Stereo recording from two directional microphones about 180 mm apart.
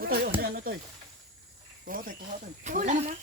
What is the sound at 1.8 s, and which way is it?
Speech, 50° right (ahead or behind).